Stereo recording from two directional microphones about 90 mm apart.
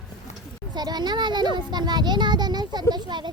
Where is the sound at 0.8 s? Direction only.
50° right (ahead or behind).